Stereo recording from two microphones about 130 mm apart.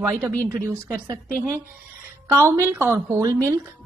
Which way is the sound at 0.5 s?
25° right (ahead or behind).